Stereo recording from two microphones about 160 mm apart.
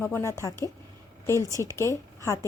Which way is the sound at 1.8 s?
20° left (ahead or behind).